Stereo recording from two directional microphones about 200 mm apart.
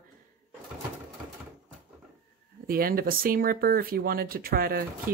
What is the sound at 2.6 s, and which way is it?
Speech, 45° right (ahead or behind).